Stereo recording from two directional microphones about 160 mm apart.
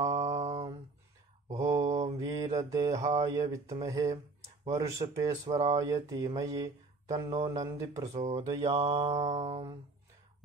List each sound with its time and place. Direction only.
0.0 s mantra: 20° right (ahead or behind)
0.3 s mantra: 45° right (ahead or behind)
1.5 s mantra: 20° right (ahead or behind)
1.9 s mantra: 45° right (ahead or behind)
2.1 s mantra: 20° right (ahead or behind)
3.3 s speech: 20° right (ahead or behind)
8.3 s mantra: 25° right (ahead or behind); by 9.7 s 40° right (ahead or behind)